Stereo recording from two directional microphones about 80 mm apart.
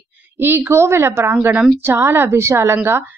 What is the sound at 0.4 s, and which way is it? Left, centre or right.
A woman's voice, right.